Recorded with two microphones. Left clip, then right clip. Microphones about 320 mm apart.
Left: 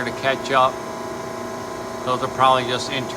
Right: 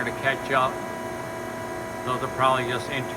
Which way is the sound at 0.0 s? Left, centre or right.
Centre.